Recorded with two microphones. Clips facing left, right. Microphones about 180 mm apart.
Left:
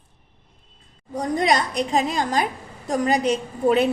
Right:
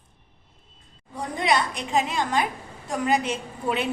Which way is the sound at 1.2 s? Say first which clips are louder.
Left 3 dB; 40° left (ahead or behind).